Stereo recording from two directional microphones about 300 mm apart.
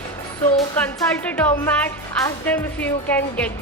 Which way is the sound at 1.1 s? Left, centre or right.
Centre.